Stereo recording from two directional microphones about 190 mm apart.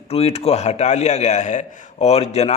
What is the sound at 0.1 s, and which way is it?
A man's voice, 35° left (ahead or behind).